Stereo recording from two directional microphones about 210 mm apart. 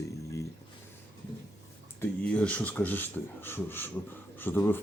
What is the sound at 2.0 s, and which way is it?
Speech, 5° left (ahead or behind).